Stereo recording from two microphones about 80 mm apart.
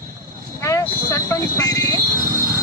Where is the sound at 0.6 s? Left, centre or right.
Left.